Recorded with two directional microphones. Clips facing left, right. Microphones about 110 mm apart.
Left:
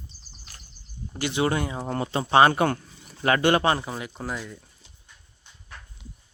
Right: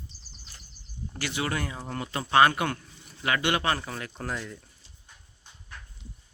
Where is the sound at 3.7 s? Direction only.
20° left (ahead or behind).